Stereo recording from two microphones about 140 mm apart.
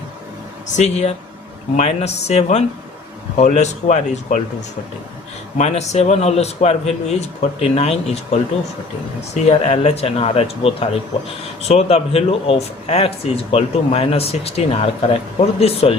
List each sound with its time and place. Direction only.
0.8 s speech: 50° left (ahead or behind)
5.5 s speech: 50° left (ahead or behind)
9.5 s speech: 50° left (ahead or behind)